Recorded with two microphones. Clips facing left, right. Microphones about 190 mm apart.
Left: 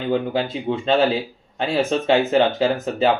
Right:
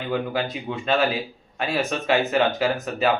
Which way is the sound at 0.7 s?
30° left (ahead or behind).